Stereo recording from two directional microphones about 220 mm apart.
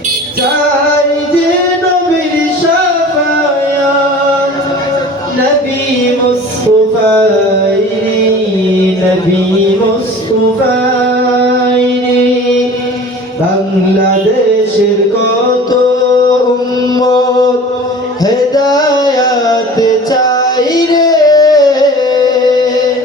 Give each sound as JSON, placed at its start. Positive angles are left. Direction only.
{"t": 17.0, "sound": "chant", "side_deg": 15}
{"t": 18.5, "sound": "music", "side_deg": 15}
{"t": 20.6, "sound": "a sound", "side_deg": 15}